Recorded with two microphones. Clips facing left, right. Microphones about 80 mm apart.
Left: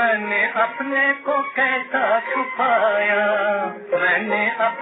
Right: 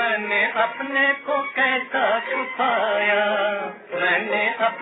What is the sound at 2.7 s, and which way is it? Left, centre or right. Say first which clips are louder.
Music: left 4 dB; left.